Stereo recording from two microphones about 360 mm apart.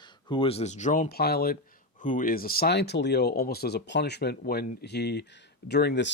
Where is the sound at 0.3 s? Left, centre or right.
Centre.